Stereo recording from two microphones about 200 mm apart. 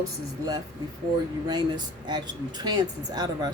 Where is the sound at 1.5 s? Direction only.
20° right (ahead or behind).